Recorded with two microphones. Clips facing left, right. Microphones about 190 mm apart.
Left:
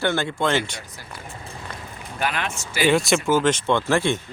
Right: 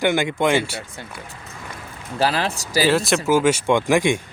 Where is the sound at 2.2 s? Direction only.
35° right (ahead or behind).